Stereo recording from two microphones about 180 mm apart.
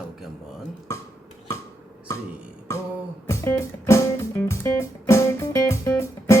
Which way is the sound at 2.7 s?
15° left (ahead or behind).